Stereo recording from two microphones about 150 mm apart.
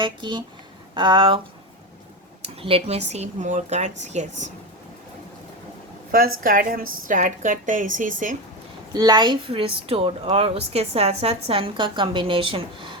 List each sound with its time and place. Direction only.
0.0 s a woman's voice: 30° right (ahead or behind)
2.6 s speech: 40° right (ahead or behind)
6.1 s a woman's voice: 80° right; by 8.4 s 60° right (ahead or behind)
8.9 s a woman's voice: 25° right (ahead or behind)